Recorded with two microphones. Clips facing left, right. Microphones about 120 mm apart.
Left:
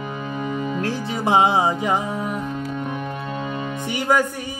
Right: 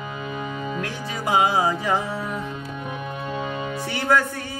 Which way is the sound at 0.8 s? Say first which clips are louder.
Left 5 dB; 25° left (ahead or behind).